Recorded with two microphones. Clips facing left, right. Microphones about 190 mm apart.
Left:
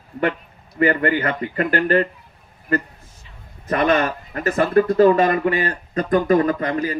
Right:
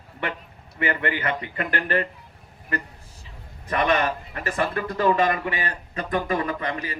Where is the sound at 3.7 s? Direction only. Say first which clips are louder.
Left 4 dB; 40° left (ahead or behind).